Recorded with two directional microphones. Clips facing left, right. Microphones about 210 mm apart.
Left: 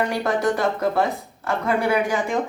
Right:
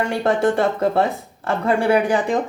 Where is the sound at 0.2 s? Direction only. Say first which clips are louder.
Right 4 dB; 30° right (ahead or behind).